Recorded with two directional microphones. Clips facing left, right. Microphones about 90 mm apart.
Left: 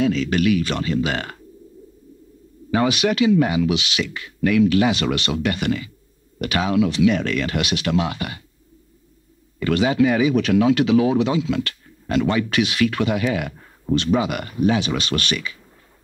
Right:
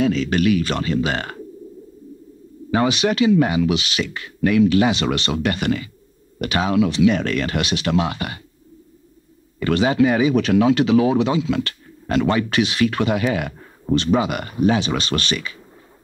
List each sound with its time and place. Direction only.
0.0 s speech: 35° right (ahead or behind)
2.7 s speech: 30° right (ahead or behind)
5.3 s speech: 40° right (ahead or behind)
6.9 s speech: 30° right (ahead or behind)
9.6 s speech: 35° right (ahead or behind)
14.0 s speech: 30° right (ahead or behind)